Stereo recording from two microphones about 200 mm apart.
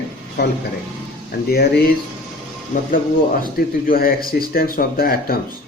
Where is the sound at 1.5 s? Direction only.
50° left (ahead or behind).